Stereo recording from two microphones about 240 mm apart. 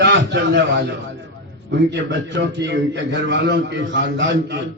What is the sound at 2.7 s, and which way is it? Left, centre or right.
A man's voice, right.